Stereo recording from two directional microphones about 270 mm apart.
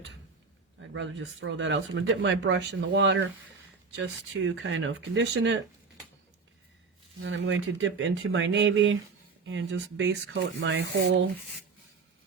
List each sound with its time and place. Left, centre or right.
0.8 s speech: right
7.2 s speech: right